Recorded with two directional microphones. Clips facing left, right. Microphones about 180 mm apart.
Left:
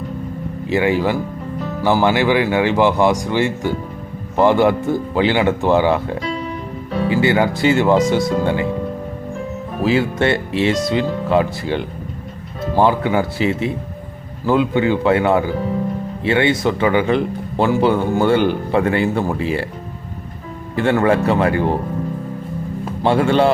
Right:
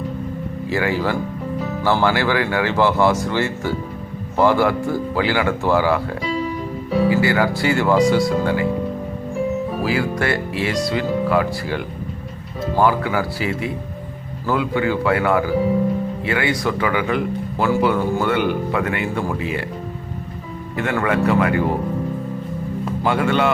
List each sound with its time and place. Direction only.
0.7 s speech: 20° left (ahead or behind)
9.8 s speech: 25° left (ahead or behind)
20.7 s speech: 30° left (ahead or behind)
23.0 s speech: 30° left (ahead or behind)